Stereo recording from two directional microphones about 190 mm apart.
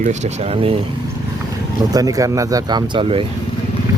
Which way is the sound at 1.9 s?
20° right (ahead or behind).